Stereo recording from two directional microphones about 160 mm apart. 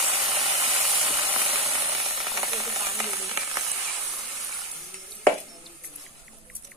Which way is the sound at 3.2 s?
20° right (ahead or behind).